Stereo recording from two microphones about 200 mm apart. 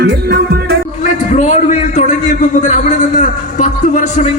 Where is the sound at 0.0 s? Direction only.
55° right (ahead or behind).